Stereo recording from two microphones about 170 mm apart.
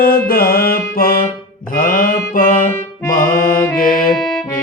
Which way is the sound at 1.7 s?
55° left (ahead or behind).